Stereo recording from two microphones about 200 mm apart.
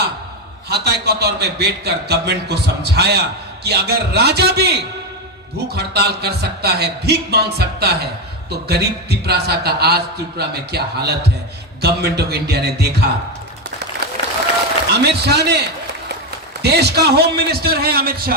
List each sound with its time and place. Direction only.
0.7 s a man's voice: 55° right (ahead or behind)
14.9 s a man's voice: 55° right (ahead or behind)
16.6 s a man's voice: 55° right (ahead or behind)